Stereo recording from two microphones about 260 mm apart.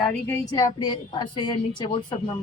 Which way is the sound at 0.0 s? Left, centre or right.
Centre.